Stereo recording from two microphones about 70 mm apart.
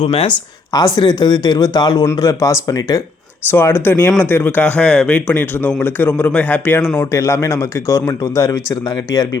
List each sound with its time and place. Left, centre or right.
0.7 s speech: left
2.0 s speech: left
3.5 s speech: left
7.1 s speech: left